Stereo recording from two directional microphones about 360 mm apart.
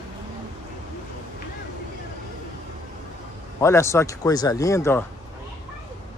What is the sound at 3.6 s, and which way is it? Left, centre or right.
Speech, centre.